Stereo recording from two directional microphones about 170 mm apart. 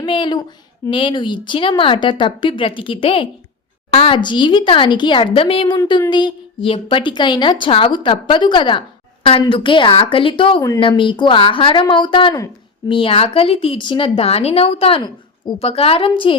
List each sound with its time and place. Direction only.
0.0 s a woman's voice: 30° left (ahead or behind)